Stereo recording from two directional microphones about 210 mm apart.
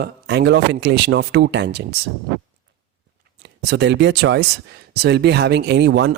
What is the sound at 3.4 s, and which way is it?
Speech, 50° right (ahead or behind).